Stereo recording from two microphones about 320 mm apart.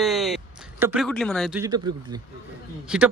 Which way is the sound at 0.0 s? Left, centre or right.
Centre.